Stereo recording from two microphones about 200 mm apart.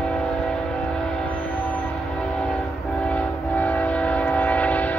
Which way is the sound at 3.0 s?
5° left (ahead or behind).